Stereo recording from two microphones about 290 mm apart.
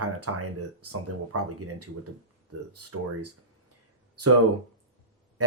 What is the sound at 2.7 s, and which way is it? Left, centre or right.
Speech, right.